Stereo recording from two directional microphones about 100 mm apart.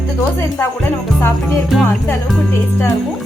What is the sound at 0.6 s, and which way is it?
Music, 25° left (ahead or behind).